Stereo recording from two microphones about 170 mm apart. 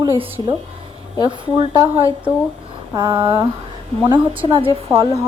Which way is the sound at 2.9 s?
25° right (ahead or behind).